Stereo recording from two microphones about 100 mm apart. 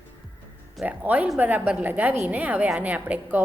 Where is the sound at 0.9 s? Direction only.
15° right (ahead or behind).